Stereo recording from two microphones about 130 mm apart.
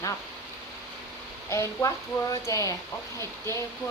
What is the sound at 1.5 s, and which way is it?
Speech, 25° left (ahead or behind).